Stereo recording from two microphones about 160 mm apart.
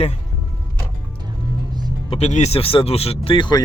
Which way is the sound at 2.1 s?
45° left (ahead or behind).